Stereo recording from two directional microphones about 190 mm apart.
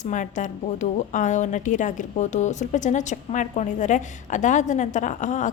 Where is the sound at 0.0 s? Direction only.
40° left (ahead or behind).